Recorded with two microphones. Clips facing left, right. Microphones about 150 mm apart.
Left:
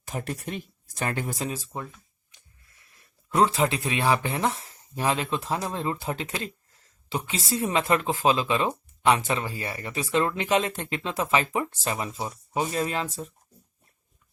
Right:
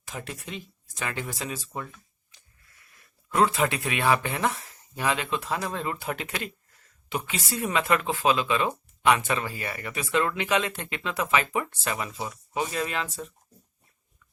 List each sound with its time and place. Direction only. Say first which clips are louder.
0.1 s speech: left 5 dB; 50° left (ahead or behind)
3.2 s speech: left 1 dB; 30° left (ahead or behind)